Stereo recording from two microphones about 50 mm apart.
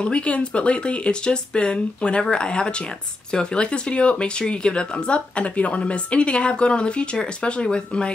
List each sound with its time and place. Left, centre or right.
0.0 s speech: left